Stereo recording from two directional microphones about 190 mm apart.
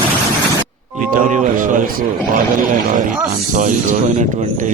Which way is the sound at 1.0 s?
45° right (ahead or behind).